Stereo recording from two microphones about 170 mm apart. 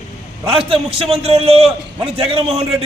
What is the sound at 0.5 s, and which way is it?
A man's voice, 35° right (ahead or behind).